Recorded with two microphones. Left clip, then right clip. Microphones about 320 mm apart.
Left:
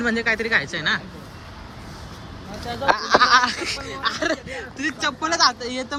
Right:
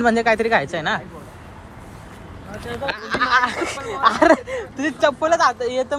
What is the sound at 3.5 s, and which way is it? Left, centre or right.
Speech, centre.